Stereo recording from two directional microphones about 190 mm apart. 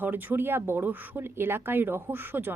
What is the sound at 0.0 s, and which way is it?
Speech, 10° right (ahead or behind).